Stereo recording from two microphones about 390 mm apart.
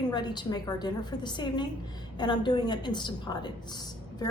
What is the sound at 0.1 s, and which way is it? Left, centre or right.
A woman's voice, centre.